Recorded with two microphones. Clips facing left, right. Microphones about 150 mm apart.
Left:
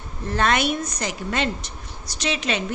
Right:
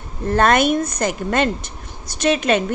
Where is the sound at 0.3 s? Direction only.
50° right (ahead or behind).